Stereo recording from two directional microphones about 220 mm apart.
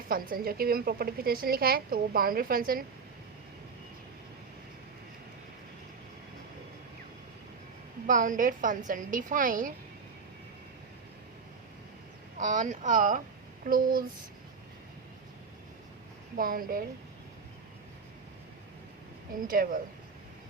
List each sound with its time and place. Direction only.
0.1 s speech: 40° right (ahead or behind)
8.0 s speech: 35° right (ahead or behind)
12.4 s speech: 35° right (ahead or behind)
16.4 s speech: 40° right (ahead or behind)
19.5 s speech: 40° right (ahead or behind)